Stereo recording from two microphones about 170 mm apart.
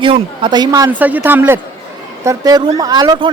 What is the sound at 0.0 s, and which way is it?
Speech, 30° right (ahead or behind).